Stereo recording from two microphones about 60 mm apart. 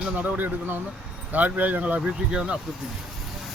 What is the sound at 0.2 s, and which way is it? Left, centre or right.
Speech, right.